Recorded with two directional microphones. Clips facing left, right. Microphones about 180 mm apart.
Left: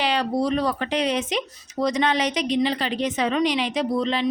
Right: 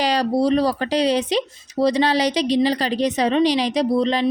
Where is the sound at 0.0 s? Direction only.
40° right (ahead or behind).